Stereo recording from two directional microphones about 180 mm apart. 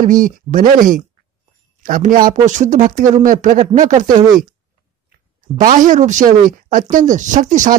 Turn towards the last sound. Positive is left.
turn(degrees=-45)  # may be behind; listen again after turning